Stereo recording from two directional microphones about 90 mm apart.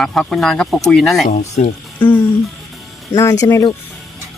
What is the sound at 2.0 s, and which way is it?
Music, 20° left (ahead or behind).